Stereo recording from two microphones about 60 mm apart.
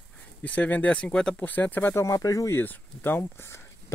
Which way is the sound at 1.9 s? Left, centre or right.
Left.